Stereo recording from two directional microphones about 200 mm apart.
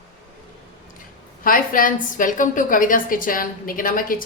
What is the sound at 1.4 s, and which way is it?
A woman's voice, 45° left (ahead or behind).